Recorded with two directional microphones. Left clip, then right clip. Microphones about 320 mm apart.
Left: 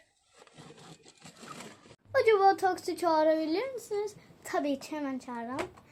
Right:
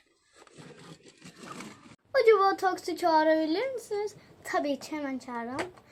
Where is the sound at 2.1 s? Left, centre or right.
Centre.